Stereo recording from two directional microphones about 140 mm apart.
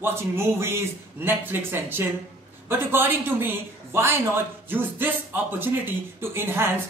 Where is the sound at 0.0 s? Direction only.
15° right (ahead or behind).